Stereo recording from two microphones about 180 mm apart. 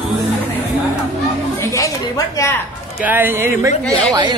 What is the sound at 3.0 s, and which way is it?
Speech, 10° right (ahead or behind).